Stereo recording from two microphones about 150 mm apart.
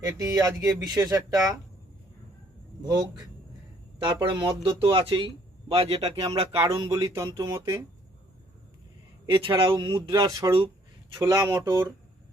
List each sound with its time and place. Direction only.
0.0 s speech: 20° right (ahead or behind)
2.8 s speech: 25° right (ahead or behind)
6.8 s speech: 25° right (ahead or behind)
9.2 s speech: 35° right (ahead or behind); by 11.9 s 20° right (ahead or behind)